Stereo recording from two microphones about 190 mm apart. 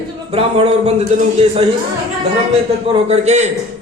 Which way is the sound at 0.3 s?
30° right (ahead or behind).